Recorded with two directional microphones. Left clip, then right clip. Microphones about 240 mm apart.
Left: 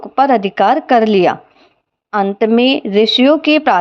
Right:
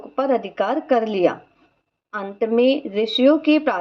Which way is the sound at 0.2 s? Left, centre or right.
Left.